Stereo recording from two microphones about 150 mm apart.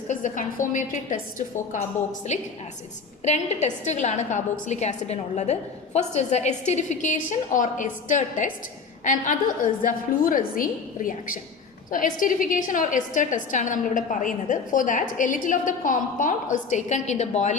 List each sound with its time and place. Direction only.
0.1 s a woman's voice: 60° left (ahead or behind)
9.8 s a woman's voice: 65° left (ahead or behind)